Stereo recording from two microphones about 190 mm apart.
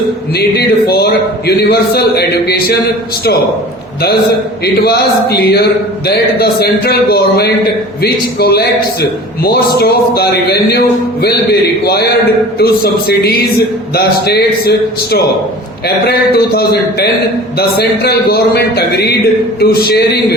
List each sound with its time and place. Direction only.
0.3 s music: 55° left (ahead or behind)
1.5 s a man's voice: 55° left (ahead or behind)
4.6 s a man's voice: 60° left (ahead or behind)